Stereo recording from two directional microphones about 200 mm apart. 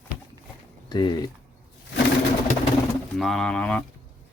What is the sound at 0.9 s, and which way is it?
Speech, 20° left (ahead or behind).